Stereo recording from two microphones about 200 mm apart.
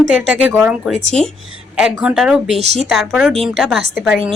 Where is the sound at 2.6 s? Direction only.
30° right (ahead or behind).